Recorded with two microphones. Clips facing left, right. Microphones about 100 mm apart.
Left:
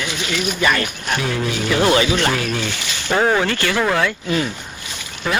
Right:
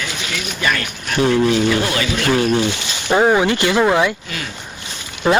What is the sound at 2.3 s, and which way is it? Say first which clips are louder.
Speech: right 7 dB; 30° right (ahead or behind).